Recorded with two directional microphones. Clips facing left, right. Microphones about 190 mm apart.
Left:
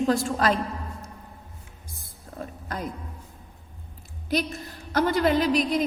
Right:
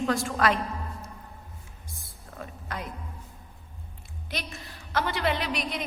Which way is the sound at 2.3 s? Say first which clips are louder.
Left 3 dB; 40° left (ahead or behind).